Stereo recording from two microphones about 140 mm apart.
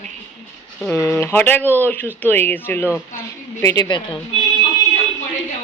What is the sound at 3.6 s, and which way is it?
Speech, 25° left (ahead or behind).